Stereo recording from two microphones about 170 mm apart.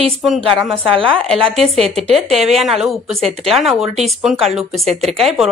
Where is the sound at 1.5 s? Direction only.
40° right (ahead or behind).